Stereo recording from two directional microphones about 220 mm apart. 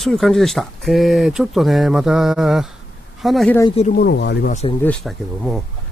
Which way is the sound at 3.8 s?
40° left (ahead or behind).